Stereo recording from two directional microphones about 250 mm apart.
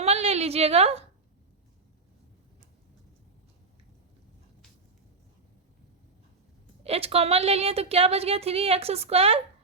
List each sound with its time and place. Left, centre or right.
0.0 s a woman's voice: right
6.8 s a woman's voice: right